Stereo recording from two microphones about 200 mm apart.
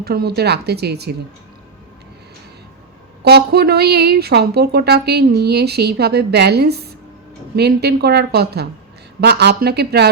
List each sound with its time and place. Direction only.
0.0 s a woman's voice: 50° right (ahead or behind)
3.2 s a woman's voice: 55° right (ahead or behind)